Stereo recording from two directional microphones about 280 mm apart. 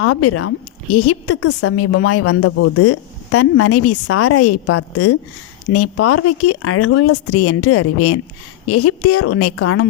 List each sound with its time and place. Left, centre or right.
0.0 s a woman's voice: left